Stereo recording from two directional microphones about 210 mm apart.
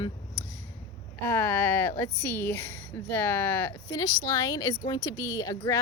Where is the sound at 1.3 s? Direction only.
10° left (ahead or behind).